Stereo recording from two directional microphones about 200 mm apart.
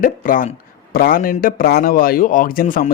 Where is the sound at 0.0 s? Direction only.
45° left (ahead or behind).